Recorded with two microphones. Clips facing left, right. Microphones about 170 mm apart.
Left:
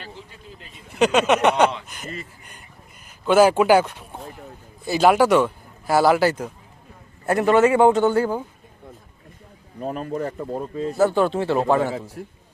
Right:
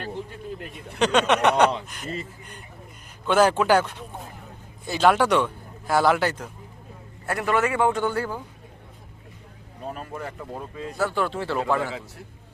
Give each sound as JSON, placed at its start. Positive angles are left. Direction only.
{"t": 0.9, "sound": "a sound", "side_deg": 5}
{"t": 3.2, "sound": "speech", "side_deg": 10}
{"t": 4.9, "sound": "speech", "side_deg": 10}
{"t": 7.3, "sound": "speech", "side_deg": 25}
{"t": 9.8, "sound": "speech", "side_deg": 40}
{"t": 10.3, "sound": "speech", "side_deg": 30}